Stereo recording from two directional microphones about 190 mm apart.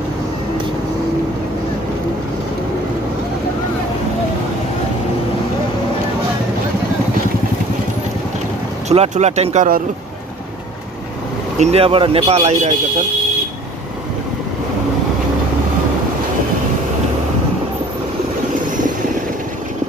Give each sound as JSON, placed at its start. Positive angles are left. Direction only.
{"t": 8.8, "sound": "speech", "side_deg": -35}
{"t": 11.5, "sound": "speech", "side_deg": -35}